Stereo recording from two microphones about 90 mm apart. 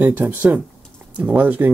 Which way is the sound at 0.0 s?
20° right (ahead or behind).